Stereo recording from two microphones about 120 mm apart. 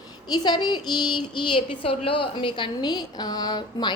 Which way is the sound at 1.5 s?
45° left (ahead or behind).